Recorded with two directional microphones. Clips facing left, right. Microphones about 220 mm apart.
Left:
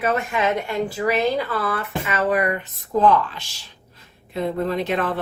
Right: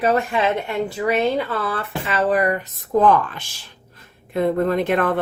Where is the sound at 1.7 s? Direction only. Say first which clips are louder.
Even; 35° right (ahead or behind).